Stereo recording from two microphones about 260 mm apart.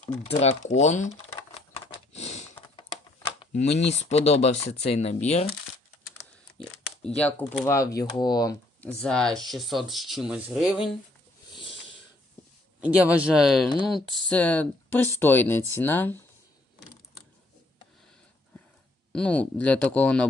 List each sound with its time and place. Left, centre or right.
0.2 s speech: left
0.7 s typewriter: left
3.4 s a sound: left
3.8 s speech: left
7.0 s speech: centre
9.0 s speech: centre
12.8 s speech: centre
19.1 s speech: centre